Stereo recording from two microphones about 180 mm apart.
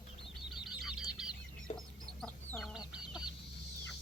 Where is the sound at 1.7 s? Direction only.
30° left (ahead or behind).